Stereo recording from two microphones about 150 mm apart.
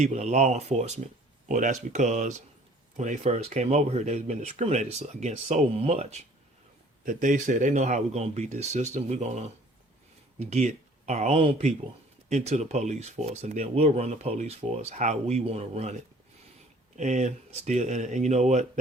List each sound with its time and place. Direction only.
0.0 s speech: 50° right (ahead or behind)
7.0 s speech: 55° right (ahead or behind)
17.0 s speech: 55° right (ahead or behind)